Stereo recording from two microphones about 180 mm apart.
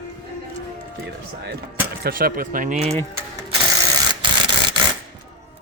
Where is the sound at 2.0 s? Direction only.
55° right (ahead or behind).